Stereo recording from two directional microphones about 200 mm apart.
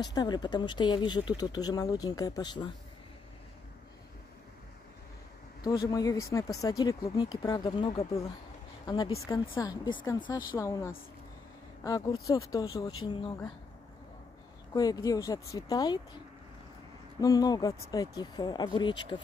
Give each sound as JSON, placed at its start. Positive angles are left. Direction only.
{"t": 0.0, "sound": "speech", "side_deg": 20}
{"t": 5.6, "sound": "speech", "side_deg": 20}
{"t": 14.7, "sound": "speech", "side_deg": 20}
{"t": 17.2, "sound": "speech", "side_deg": 20}